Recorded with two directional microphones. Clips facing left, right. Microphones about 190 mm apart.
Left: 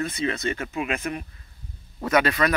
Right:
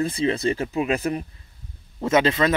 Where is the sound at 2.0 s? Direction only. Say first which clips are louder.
Right 2 dB; 25° right (ahead or behind).